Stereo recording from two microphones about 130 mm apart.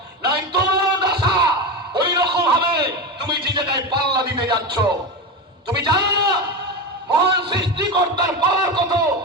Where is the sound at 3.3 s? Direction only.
35° right (ahead or behind).